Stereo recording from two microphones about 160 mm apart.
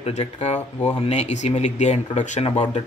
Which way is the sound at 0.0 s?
40° left (ahead or behind).